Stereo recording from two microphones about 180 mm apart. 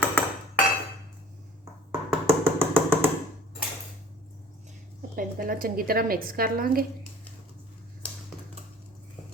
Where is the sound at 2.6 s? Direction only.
15° right (ahead or behind).